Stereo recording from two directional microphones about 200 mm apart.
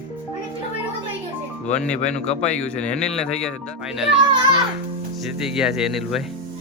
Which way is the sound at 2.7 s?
5° left (ahead or behind).